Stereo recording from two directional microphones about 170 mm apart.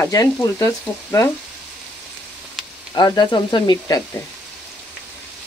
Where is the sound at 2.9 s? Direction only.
25° left (ahead or behind).